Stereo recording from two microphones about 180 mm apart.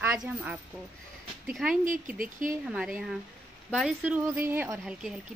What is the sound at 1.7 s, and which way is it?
Speech, 50° right (ahead or behind).